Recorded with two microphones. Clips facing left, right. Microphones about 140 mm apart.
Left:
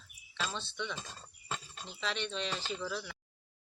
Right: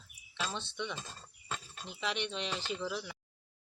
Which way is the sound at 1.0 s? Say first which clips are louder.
Even; centre (ahead or behind).